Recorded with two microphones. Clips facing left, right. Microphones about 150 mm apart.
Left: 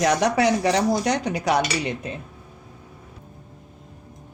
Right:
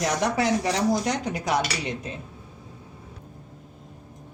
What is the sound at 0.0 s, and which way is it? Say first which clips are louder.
Speech: left 5 dB; 75° left (ahead or behind).